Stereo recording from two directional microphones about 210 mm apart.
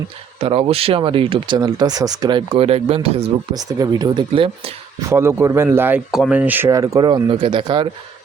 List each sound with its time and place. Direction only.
0.3 s speech: 25° right (ahead or behind)
5.0 s speech: 10° right (ahead or behind)